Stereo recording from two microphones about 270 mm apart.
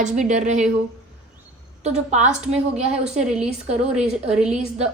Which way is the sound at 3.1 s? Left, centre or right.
Centre.